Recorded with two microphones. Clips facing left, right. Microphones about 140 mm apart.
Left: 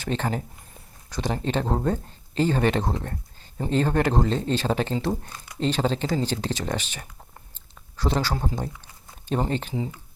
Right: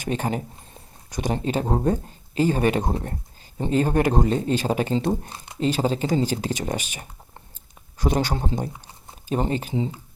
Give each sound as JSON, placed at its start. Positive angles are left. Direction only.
{"t": 0.0, "sound": "speech", "side_deg": -15}
{"t": 4.9, "sound": "speech", "side_deg": -25}
{"t": 5.5, "sound": "speech", "side_deg": -10}
{"t": 9.5, "sound": "speech", "side_deg": -10}
{"t": 9.7, "sound": "speech", "side_deg": -20}